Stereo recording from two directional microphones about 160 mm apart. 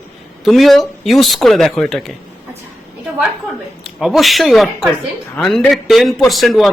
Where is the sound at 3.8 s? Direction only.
Centre (ahead or behind).